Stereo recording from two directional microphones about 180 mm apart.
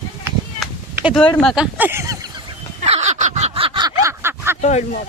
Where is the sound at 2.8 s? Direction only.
35° right (ahead or behind); by 4.5 s 15° right (ahead or behind).